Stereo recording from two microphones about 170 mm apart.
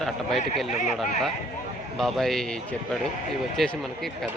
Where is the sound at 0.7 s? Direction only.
45° left (ahead or behind).